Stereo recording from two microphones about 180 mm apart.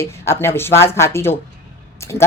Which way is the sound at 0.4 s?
15° left (ahead or behind).